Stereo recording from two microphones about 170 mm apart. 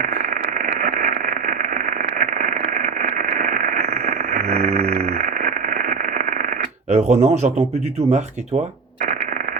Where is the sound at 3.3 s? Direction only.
55° right (ahead or behind).